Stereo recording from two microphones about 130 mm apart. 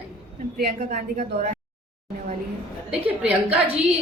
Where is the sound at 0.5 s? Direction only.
90° right.